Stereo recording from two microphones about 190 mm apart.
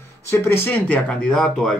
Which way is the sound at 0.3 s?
10° left (ahead or behind).